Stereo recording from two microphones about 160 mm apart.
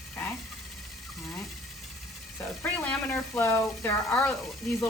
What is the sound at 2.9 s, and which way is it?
Speech, 10° left (ahead or behind).